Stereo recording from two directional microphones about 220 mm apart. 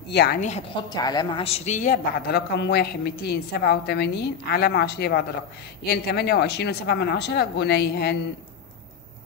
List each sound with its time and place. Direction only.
0.1 s speech: 50° left (ahead or behind)
0.4 s a woman's voice: 30° left (ahead or behind)
0.9 s speech: 20° left (ahead or behind); by 8.2 s 45° left (ahead or behind)